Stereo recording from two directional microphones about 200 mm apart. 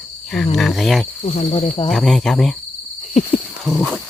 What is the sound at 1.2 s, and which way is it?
Speech, 30° left (ahead or behind).